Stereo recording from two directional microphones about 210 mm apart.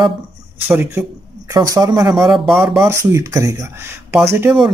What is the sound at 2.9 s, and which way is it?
Speech, 15° right (ahead or behind).